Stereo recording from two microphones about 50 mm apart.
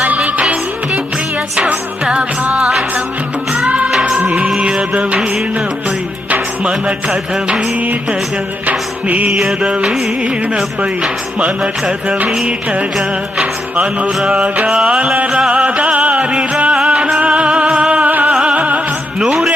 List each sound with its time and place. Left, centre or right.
0.0 s music: right
2.4 s music: right
4.2 s music: right
6.7 s music: right
8.6 s music: right
13.4 s music: right